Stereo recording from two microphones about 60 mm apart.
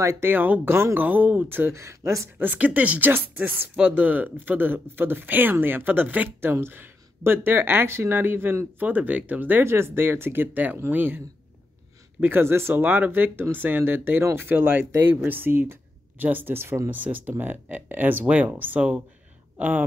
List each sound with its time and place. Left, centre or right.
0.2 s speech: right
1.7 s speech: right
2.3 s speech: right
9.7 s speech: right